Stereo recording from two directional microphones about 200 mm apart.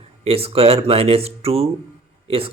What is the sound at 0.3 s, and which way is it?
Speech, 30° right (ahead or behind).